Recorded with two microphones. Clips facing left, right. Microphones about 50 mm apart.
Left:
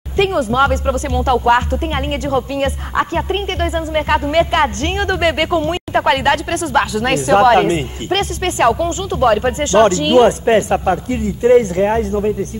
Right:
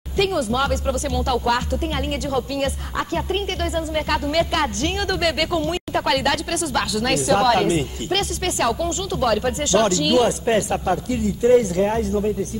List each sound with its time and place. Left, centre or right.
0.2 s a woman's voice: left